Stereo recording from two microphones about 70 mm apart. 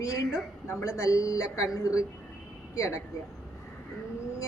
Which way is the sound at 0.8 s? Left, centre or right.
Left.